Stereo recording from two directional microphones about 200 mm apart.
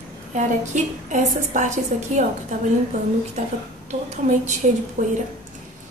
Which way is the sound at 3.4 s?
35° right (ahead or behind).